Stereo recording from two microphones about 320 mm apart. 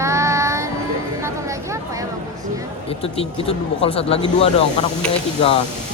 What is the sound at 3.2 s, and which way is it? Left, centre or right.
Speech, centre.